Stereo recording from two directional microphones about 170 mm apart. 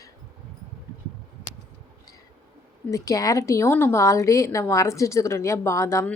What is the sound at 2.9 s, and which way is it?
Speech, 20° left (ahead or behind).